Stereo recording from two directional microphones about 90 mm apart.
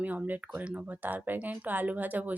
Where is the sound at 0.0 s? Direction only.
20° right (ahead or behind).